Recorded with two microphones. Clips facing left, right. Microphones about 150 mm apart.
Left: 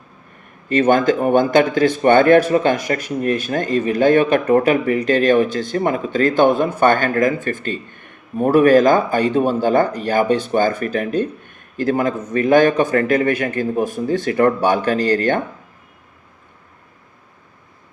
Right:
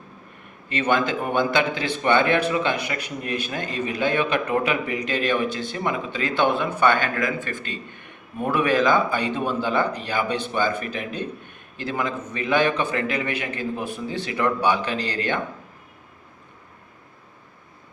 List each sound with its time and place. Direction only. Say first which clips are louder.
0.7 s a man's voice: left 8 dB; 45° left (ahead or behind)